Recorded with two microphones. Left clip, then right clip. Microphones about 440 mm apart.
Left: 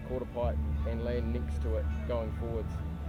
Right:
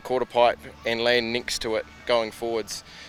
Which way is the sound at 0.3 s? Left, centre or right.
Right.